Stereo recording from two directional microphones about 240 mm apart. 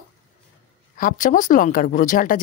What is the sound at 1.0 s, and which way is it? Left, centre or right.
Speech, left.